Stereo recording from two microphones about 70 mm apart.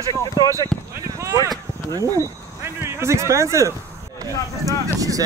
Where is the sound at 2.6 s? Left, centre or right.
Right.